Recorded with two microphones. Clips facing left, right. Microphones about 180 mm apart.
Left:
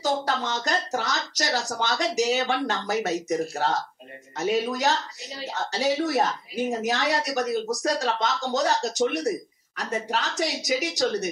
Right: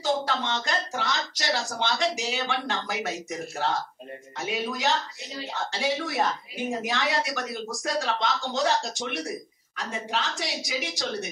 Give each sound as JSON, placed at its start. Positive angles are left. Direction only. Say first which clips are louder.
{"t": 0.0, "sound": "a woman's voice", "louder": "left 1 dB", "side_deg": 40}
{"t": 4.4, "sound": "a woman's voice", "louder": "left 5 dB", "side_deg": 40}